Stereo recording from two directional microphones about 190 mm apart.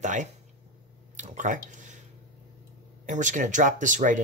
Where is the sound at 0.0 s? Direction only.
40° right (ahead or behind).